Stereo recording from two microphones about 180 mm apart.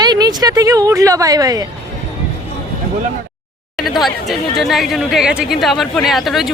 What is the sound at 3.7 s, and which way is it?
Speech, centre (ahead or behind).